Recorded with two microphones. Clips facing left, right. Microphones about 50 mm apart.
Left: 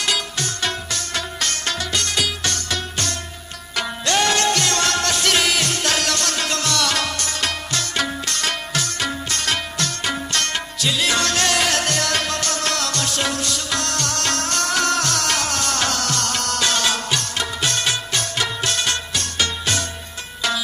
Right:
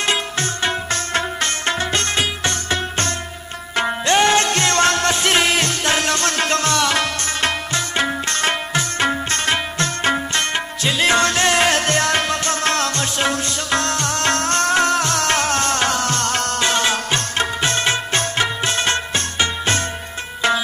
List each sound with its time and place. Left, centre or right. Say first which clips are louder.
0.0 s music: right 3 dB; right